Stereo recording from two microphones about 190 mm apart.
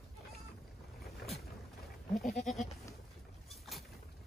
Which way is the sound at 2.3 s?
Centre (ahead or behind).